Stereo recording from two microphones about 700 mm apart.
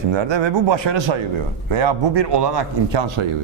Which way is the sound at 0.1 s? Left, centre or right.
Right.